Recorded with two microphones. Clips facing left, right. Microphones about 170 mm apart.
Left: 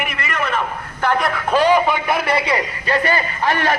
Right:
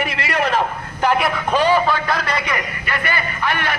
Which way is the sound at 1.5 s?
15° left (ahead or behind).